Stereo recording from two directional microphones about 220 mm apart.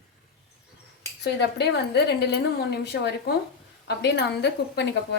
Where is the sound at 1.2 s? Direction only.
50° left (ahead or behind).